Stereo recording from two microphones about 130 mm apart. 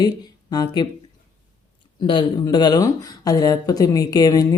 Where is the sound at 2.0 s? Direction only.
35° left (ahead or behind).